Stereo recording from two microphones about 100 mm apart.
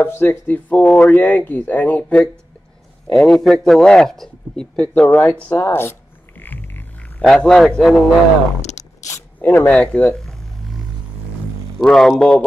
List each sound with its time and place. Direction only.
0.0 s speech: 20° left (ahead or behind)
3.1 s a man's voice: 5° left (ahead or behind)
5.6 s speech: 25° left (ahead or behind)
6.4 s a sound: 20° left (ahead or behind)
7.2 s speech: 5° left (ahead or behind)
9.4 s speech: 15° left (ahead or behind)
10.1 s a sound: 5° left (ahead or behind)
11.8 s a man's voice: 5° left (ahead or behind)